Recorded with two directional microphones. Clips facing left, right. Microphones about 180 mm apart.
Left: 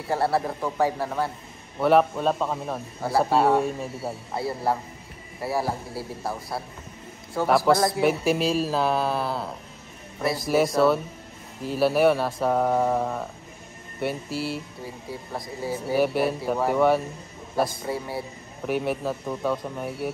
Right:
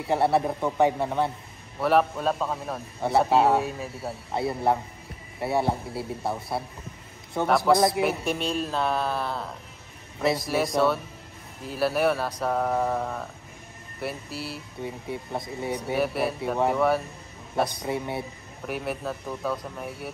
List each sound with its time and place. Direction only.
0.1 s speech: 20° right (ahead or behind)
1.8 s mantra: centre (ahead or behind)
4.3 s speech: 20° right (ahead or behind)
7.4 s mantra: centre (ahead or behind)
14.8 s speech: 25° right (ahead or behind)
15.9 s mantra: centre (ahead or behind)
17.8 s speech: 25° right (ahead or behind)
18.7 s mantra: centre (ahead or behind)